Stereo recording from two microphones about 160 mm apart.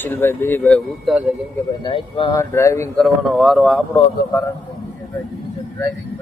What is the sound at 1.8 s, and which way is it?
Speech, 30° left (ahead or behind).